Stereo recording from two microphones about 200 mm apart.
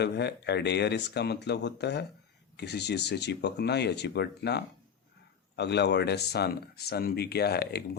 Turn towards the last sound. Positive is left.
turn(degrees=55)  # may be behind; listen again after turning